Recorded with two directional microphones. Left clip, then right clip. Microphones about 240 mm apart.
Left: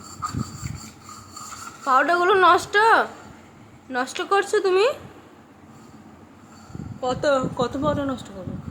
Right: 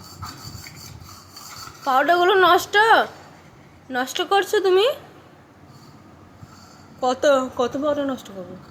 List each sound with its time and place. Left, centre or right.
1.8 s a woman's voice: centre
7.0 s a woman's voice: centre